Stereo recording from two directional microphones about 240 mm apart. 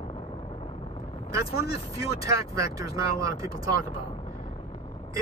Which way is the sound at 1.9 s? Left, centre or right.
Centre.